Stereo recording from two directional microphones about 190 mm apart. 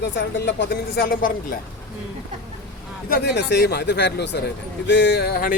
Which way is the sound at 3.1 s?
60° left (ahead or behind).